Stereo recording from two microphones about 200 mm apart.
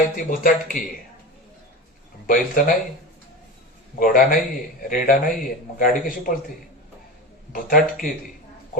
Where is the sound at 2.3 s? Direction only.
45° left (ahead or behind).